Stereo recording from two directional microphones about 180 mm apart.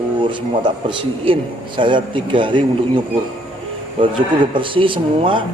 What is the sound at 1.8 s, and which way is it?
Speech, 25° right (ahead or behind).